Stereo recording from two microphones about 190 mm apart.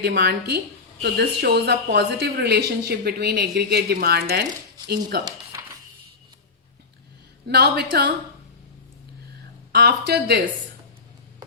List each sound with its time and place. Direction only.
0.0 s speech: 60° right (ahead or behind)
5.2 s a sound: 15° right (ahead or behind)
7.4 s speech: 60° right (ahead or behind)
9.7 s speech: 55° right (ahead or behind)